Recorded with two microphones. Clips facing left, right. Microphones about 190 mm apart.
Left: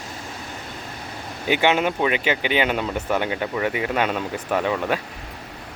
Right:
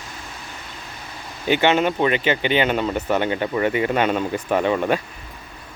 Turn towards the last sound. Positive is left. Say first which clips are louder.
# right 3 dB
turn(degrees=0)  # may be behind; listen again after turning